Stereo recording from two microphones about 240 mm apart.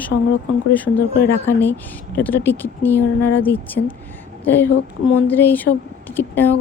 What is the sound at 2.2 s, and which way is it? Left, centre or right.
A woman's voice, centre.